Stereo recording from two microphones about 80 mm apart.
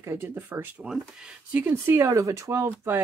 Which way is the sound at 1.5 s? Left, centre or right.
Right.